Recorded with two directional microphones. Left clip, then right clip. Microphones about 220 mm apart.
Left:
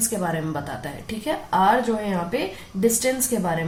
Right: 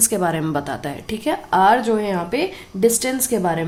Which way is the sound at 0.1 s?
45° right (ahead or behind).